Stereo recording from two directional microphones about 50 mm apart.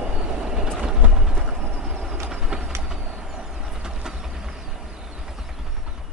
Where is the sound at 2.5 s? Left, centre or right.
Centre.